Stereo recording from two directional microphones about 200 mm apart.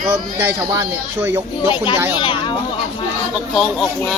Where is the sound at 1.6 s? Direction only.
25° left (ahead or behind).